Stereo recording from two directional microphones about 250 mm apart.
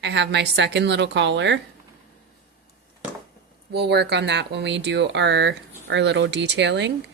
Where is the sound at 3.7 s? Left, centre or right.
Right.